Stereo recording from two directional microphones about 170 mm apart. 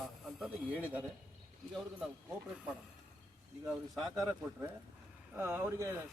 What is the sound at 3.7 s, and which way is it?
A man's voice, centre (ahead or behind).